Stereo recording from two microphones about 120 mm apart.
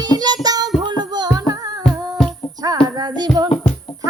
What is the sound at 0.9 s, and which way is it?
Music, 35° right (ahead or behind).